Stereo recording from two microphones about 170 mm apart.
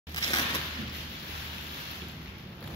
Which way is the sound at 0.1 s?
25° left (ahead or behind).